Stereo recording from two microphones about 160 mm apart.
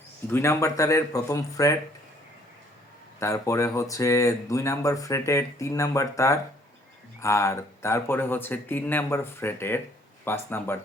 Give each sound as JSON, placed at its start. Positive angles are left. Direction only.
{"t": 0.3, "sound": "speech", "side_deg": 15}
{"t": 3.2, "sound": "speech", "side_deg": 20}